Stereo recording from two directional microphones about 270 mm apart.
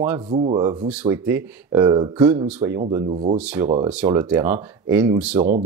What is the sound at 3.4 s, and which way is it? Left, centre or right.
Speech, centre.